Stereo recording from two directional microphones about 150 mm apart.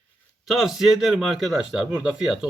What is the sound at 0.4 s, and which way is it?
A man's voice, centre (ahead or behind).